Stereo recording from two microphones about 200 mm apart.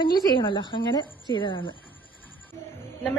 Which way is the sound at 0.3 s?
25° left (ahead or behind).